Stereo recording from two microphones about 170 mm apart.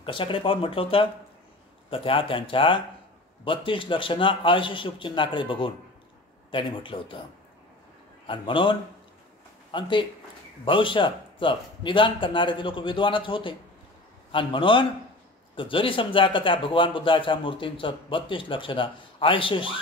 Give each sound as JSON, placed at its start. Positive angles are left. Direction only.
{"t": 0.0, "sound": "speech", "side_deg": 30}
{"t": 8.3, "sound": "speech", "side_deg": 30}